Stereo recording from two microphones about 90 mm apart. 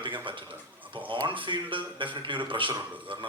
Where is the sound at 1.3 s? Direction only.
65° right (ahead or behind).